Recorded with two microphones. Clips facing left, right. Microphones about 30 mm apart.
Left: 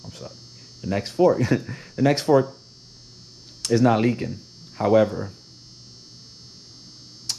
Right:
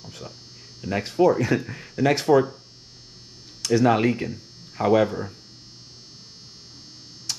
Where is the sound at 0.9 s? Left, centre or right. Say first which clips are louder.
Even; right.